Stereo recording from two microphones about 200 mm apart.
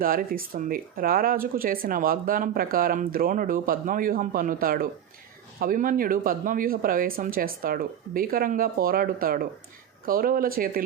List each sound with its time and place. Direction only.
0.0 s speech: 45° right (ahead or behind)